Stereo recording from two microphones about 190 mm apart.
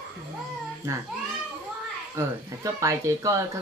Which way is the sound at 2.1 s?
15° right (ahead or behind).